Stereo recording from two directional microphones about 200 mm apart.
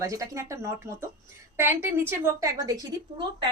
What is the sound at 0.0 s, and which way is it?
A woman's voice, 15° right (ahead or behind).